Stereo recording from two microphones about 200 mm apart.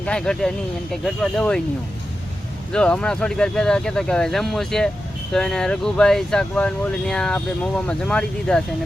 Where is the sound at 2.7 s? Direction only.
5° left (ahead or behind).